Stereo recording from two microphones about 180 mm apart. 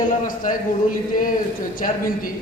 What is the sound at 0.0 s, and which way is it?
Speech, 50° left (ahead or behind).